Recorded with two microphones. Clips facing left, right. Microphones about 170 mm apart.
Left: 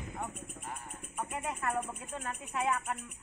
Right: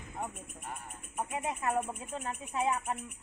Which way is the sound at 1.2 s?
15° right (ahead or behind).